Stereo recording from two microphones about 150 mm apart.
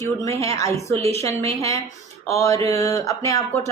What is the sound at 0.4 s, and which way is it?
Speech, 20° left (ahead or behind).